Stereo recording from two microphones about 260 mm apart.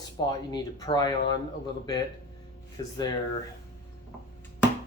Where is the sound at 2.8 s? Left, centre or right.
Centre.